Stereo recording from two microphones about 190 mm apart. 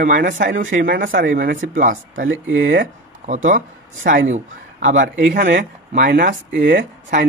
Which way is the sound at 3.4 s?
45° right (ahead or behind).